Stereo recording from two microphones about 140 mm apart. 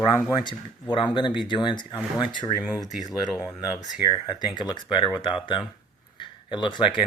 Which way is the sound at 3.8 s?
30° left (ahead or behind).